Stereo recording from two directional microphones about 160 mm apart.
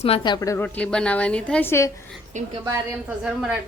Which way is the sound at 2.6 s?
15° right (ahead or behind).